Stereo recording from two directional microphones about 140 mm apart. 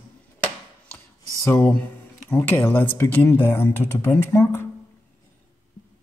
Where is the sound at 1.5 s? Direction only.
10° left (ahead or behind).